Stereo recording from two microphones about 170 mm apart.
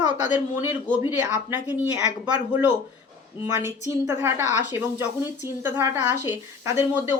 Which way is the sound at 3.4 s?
15° right (ahead or behind).